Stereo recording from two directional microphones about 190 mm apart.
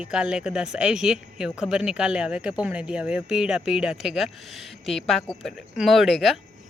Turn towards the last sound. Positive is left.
turn(degrees=0)  # may be behind; listen again after turning